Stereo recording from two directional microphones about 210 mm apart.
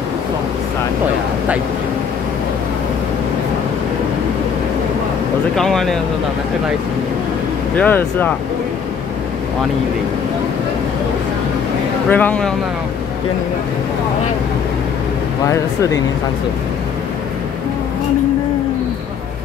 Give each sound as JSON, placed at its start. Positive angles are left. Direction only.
{"t": 5.6, "sound": "speech", "side_deg": 0}
{"t": 7.7, "sound": "speech", "side_deg": 10}
{"t": 12.1, "sound": "speech", "side_deg": 10}